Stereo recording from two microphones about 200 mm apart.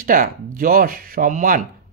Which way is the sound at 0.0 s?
45° right (ahead or behind).